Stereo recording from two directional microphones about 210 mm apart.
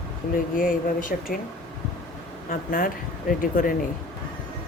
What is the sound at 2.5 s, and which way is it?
Speech, 40° left (ahead or behind).